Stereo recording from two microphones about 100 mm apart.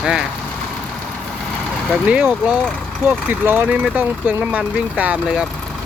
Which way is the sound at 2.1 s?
15° right (ahead or behind).